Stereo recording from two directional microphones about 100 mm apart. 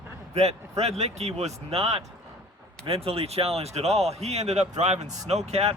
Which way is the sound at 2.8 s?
75° right (ahead or behind).